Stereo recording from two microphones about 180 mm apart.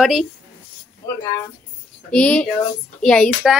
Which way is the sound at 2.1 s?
5° left (ahead or behind).